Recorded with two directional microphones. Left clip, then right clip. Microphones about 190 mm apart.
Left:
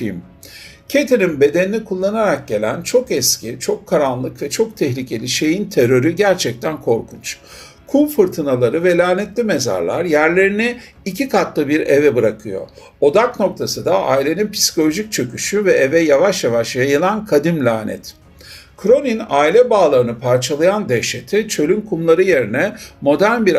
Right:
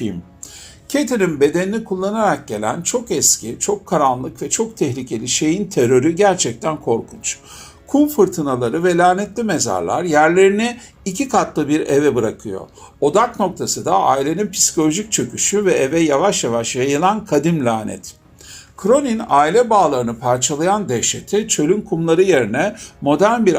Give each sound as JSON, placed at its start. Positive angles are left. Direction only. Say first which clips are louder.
{"t": 0.9, "sound": "speech", "louder": "left 4 dB", "side_deg": -35}
{"t": 23.1, "sound": "speech", "louder": "right 1 dB", "side_deg": -30}